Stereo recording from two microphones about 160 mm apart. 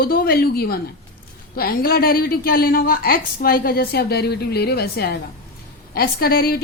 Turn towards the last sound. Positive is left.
turn(degrees=70)  # may be behind; listen again after turning